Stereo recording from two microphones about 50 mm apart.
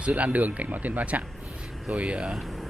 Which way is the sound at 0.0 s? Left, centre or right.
Right.